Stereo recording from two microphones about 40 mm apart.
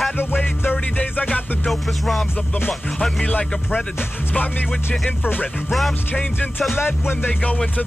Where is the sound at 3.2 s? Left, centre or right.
Left.